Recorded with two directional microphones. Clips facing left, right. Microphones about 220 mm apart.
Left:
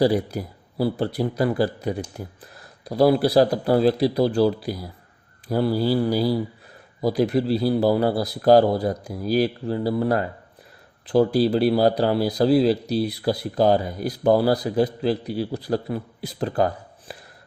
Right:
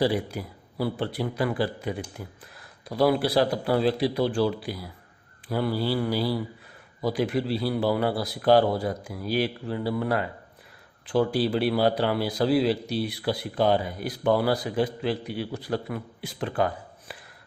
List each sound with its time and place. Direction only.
0.0 s speech: 40° left (ahead or behind)